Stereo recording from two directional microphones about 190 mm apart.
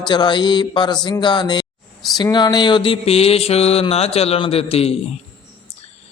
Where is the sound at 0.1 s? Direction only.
25° left (ahead or behind).